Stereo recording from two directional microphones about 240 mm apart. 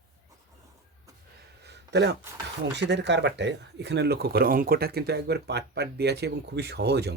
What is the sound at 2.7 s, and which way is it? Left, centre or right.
Speech, right.